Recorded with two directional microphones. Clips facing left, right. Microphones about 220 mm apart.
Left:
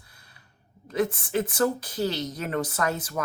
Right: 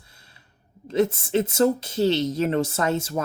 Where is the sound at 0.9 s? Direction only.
25° right (ahead or behind).